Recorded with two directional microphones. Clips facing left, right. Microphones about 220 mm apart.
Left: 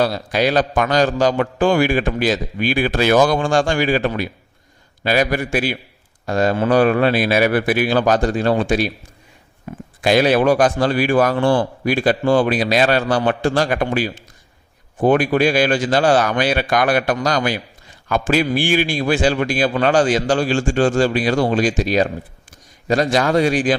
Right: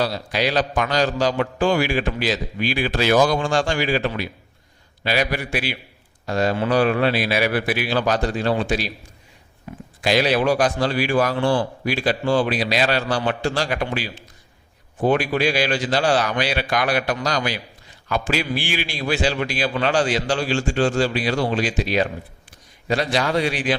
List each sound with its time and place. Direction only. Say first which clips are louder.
0.0 s a man's voice: left 5 dB; 50° left (ahead or behind)
23.1 s a man's voice: left 6 dB; 45° left (ahead or behind)